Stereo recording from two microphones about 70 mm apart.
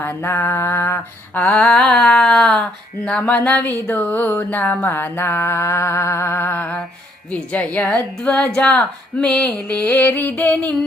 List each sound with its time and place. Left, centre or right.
0.0 s mantra: left
1.3 s a sound: left
3.1 s speech: centre
4.9 s mantra: left
7.3 s speech: centre